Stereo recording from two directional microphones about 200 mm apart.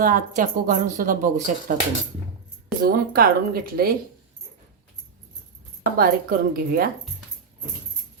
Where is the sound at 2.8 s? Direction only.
45° right (ahead or behind).